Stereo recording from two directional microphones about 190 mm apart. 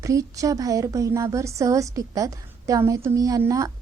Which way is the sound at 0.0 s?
15° right (ahead or behind).